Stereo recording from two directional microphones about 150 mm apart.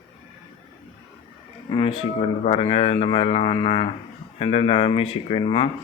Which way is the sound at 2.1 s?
45° left (ahead or behind).